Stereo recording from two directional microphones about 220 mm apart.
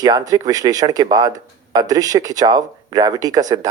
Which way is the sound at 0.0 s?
15° right (ahead or behind).